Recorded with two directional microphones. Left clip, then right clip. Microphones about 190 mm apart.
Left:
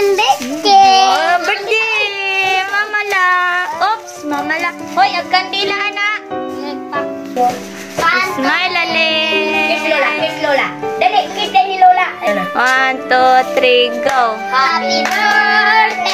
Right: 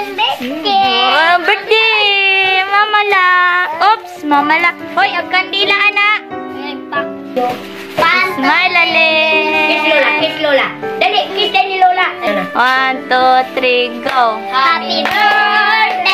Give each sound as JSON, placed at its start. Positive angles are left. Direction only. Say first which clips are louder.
{"t": 0.1, "sound": "a sound", "louder": "left 3 dB", "side_deg": 45}
{"t": 1.1, "sound": "a sound", "louder": "right 3 dB", "side_deg": -15}
{"t": 8.5, "sound": "music", "louder": "right 7 dB", "side_deg": 10}
{"t": 10.5, "sound": "music", "louder": "right 2 dB", "side_deg": -15}
{"t": 12.5, "sound": "music", "louder": "right 1 dB", "side_deg": 10}
{"t": 14.5, "sound": "music", "louder": "right 1 dB", "side_deg": -15}
{"t": 15.4, "sound": "child singing", "louder": "even", "side_deg": -20}